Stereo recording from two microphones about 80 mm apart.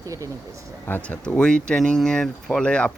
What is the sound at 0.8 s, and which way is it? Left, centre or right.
Speech, left.